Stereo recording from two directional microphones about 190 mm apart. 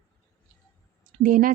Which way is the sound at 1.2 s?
45° right (ahead or behind).